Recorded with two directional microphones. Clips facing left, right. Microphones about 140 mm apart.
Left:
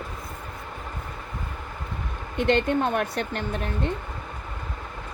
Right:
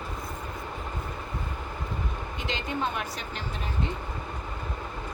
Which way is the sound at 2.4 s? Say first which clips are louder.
Left 10 dB; 60° left (ahead or behind).